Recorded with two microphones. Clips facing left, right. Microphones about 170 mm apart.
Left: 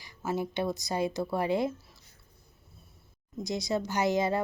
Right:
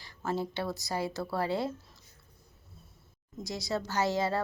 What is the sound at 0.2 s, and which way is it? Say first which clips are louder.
Speech: left 1 dB; 10° left (ahead or behind).